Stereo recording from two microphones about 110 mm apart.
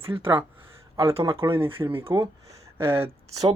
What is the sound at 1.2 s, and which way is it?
Speech, 30° right (ahead or behind).